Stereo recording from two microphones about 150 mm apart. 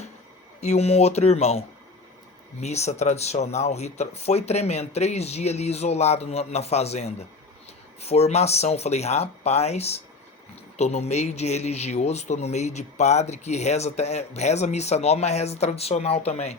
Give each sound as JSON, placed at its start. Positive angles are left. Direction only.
{"t": 0.6, "sound": "a man's voice", "side_deg": 45}